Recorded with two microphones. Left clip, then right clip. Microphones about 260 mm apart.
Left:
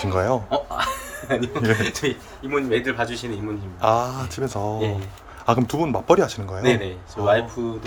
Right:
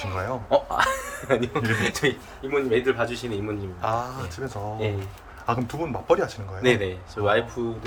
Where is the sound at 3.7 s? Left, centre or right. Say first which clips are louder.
Left 8 dB; left.